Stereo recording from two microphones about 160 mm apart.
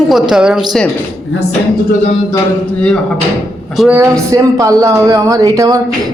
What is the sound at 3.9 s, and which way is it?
A woman's voice, 15° right (ahead or behind).